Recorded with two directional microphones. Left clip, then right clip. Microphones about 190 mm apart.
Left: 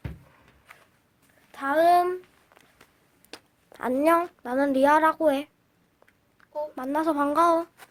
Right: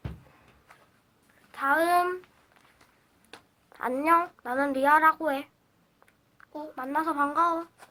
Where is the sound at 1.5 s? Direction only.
40° left (ahead or behind).